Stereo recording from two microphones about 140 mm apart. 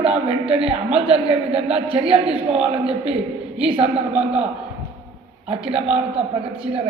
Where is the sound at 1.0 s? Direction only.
45° right (ahead or behind).